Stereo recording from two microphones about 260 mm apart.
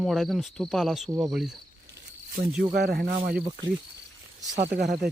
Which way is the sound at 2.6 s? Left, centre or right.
Right.